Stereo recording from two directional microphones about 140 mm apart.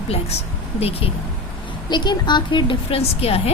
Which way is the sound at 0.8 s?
45° left (ahead or behind).